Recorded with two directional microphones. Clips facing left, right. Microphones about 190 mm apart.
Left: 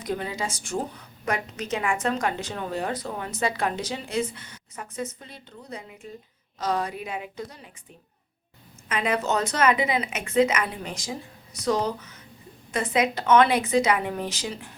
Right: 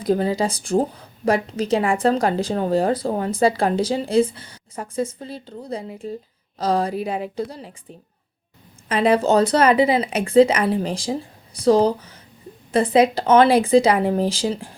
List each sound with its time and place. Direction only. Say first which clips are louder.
0.0 s speech: right 10 dB; 35° right (ahead or behind)
8.9 s speech: right 9 dB; 30° right (ahead or behind)